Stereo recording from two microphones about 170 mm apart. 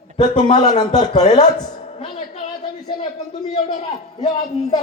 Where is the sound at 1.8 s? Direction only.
30° left (ahead or behind).